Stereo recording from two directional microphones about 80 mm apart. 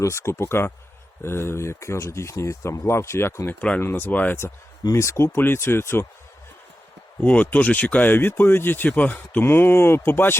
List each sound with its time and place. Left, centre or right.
0.0 s speech: left
4.9 s speech: left
7.2 s speech: centre
9.4 s speech: left